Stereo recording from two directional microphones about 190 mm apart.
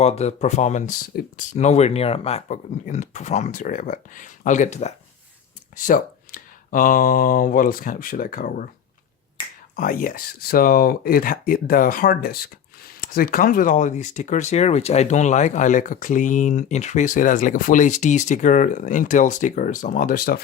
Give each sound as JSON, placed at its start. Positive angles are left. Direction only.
{"t": 0.0, "sound": "speech", "side_deg": 35}
{"t": 9.7, "sound": "speech", "side_deg": 45}